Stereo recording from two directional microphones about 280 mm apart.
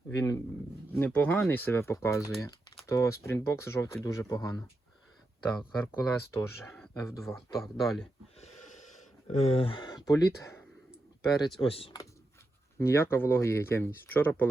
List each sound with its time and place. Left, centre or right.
0.1 s speech: centre
8.4 s a sound: left
11.5 s speech: centre
12.8 s speech: centre